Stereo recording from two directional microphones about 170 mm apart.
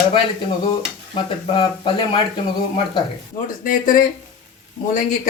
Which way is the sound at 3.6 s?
55° left (ahead or behind).